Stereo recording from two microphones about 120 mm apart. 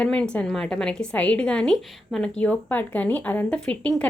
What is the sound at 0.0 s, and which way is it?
A woman's voice, 10° left (ahead or behind).